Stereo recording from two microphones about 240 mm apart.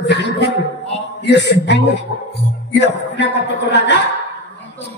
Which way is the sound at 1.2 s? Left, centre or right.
Left.